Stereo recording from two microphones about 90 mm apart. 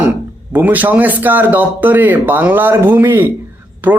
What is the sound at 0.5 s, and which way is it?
Speech, 20° right (ahead or behind).